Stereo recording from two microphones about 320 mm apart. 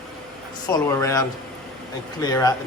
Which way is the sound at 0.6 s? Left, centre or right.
Centre.